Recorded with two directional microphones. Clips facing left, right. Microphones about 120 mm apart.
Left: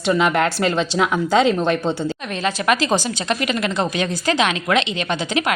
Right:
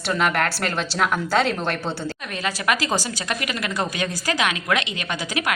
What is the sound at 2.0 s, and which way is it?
A woman's voice, 25° left (ahead or behind).